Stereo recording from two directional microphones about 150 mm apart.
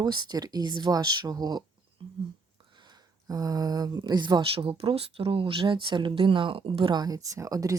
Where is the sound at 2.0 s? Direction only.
35° right (ahead or behind).